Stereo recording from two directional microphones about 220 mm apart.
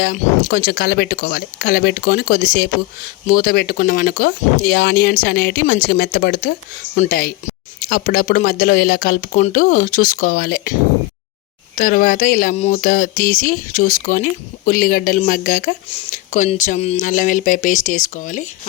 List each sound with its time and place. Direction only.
0.0 s speech: 40° left (ahead or behind)
11.8 s speech: 40° left (ahead or behind)